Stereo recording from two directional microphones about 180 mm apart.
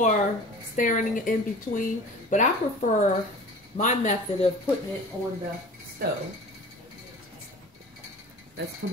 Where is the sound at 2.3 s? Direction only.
45° left (ahead or behind).